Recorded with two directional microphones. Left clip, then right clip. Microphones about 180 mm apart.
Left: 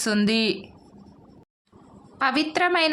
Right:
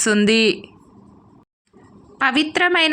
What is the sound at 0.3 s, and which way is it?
Speech, 20° right (ahead or behind).